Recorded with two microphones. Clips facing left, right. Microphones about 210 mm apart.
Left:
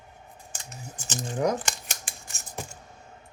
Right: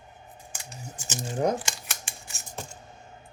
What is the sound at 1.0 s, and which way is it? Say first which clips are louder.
Speech: left 1 dB; 10° right (ahead or behind).